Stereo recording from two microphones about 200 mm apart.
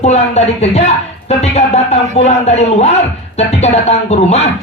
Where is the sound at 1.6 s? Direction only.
35° left (ahead or behind).